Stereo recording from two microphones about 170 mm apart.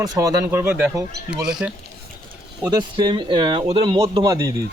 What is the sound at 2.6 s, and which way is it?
Speech, 25° right (ahead or behind).